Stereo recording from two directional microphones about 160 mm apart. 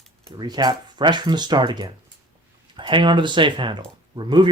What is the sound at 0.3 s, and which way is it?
Speech, 25° right (ahead or behind).